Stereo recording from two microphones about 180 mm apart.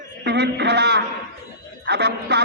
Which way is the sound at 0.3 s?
70° right (ahead or behind).